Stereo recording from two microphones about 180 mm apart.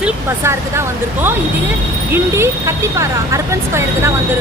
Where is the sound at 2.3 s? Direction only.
15° right (ahead or behind).